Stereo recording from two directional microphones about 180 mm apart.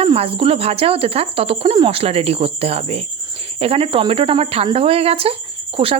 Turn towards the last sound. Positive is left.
turn(degrees=-30)  # may be behind; listen again after turning